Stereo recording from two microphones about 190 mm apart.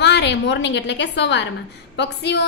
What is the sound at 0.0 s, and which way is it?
A woman's voice, 65° left (ahead or behind).